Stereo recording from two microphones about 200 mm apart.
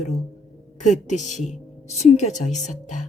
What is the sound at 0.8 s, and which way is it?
A woman's voice, 35° left (ahead or behind).